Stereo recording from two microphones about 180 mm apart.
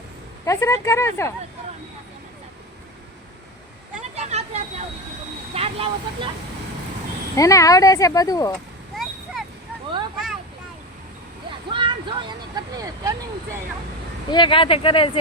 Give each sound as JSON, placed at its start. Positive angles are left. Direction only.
{"t": 0.4, "sound": "speech", "side_deg": 15}
{"t": 4.0, "sound": "a sound", "side_deg": -35}
{"t": 5.5, "sound": "speech", "side_deg": -30}
{"t": 7.3, "sound": "speech", "side_deg": 20}
{"t": 9.4, "sound": "a sound", "side_deg": 0}
{"t": 11.7, "sound": "speech", "side_deg": -25}
{"t": 14.3, "sound": "speech", "side_deg": 25}